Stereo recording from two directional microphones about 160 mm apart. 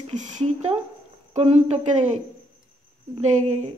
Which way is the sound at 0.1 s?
50° right (ahead or behind).